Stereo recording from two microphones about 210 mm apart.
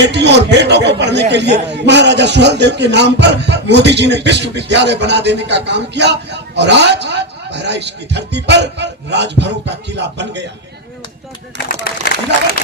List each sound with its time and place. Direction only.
0.0 s a man's voice: 55° right (ahead or behind)